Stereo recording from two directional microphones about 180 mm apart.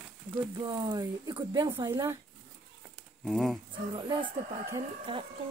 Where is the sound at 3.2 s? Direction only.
Centre (ahead or behind).